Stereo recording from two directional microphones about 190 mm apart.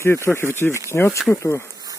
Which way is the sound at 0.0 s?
15° left (ahead or behind).